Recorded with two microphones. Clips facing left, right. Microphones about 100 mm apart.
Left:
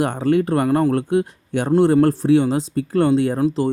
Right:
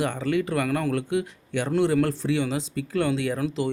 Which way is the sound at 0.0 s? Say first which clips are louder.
Left 7 dB; 45° left (ahead or behind).